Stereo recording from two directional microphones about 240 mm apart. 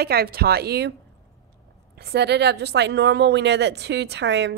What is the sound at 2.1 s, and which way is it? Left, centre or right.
Speech, right.